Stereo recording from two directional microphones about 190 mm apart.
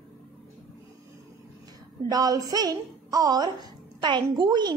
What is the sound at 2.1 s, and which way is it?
A woman's voice, 20° right (ahead or behind).